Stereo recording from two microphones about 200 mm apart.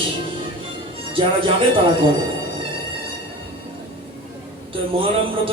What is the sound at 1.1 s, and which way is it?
Speech, 25° right (ahead or behind).